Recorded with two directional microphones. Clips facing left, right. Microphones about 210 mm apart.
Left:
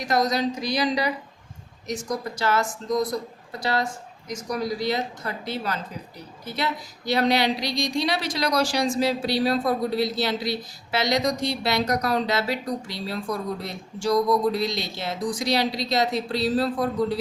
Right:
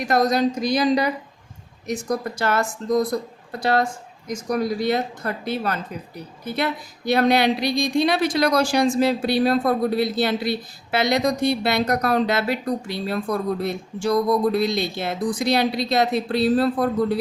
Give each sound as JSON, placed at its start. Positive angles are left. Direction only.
{"t": 0.0, "sound": "speech", "side_deg": -55}